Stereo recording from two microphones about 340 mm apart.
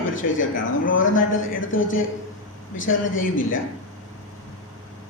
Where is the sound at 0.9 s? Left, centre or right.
Left.